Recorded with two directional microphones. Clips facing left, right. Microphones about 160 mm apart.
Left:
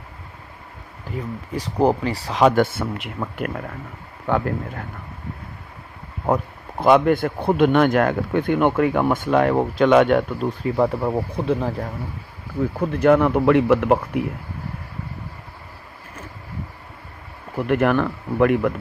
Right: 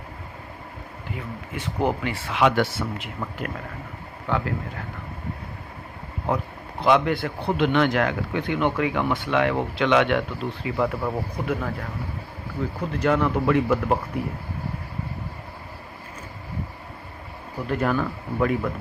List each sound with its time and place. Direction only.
1.5 s speech: 35° left (ahead or behind); by 4.4 s 50° left (ahead or behind)
6.2 s speech: 45° left (ahead or behind)
10.8 s speech: 30° left (ahead or behind)
12.9 s a man's voice: 55° left (ahead or behind); by 14.0 s 75° left (ahead or behind)
17.7 s speech: 70° left (ahead or behind)